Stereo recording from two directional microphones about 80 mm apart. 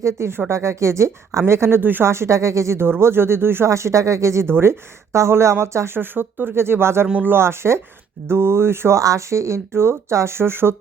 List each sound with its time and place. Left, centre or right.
0.0 s speech: right